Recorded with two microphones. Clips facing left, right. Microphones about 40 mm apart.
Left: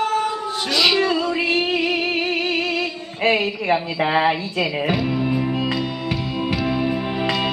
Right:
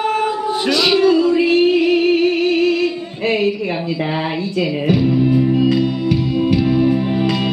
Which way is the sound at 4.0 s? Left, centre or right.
Centre.